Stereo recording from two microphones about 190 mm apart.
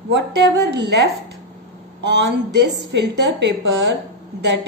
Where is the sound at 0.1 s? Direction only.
60° right (ahead or behind).